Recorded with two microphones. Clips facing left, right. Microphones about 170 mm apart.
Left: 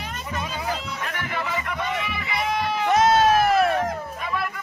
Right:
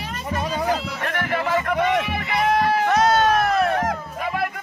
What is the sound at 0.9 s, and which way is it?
Music, 60° right (ahead or behind).